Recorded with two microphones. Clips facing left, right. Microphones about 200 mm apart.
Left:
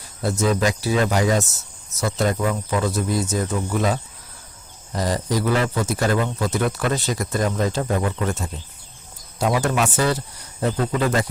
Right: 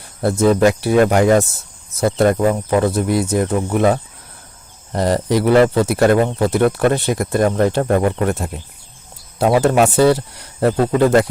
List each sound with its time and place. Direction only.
0.2 s speech: 55° right (ahead or behind)